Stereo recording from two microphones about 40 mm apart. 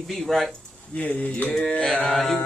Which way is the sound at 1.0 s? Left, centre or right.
Left.